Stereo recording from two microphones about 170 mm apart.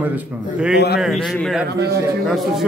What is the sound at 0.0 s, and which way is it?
A man's voice, 5° right (ahead or behind).